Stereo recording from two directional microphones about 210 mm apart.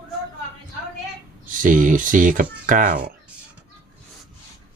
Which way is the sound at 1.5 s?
40° right (ahead or behind).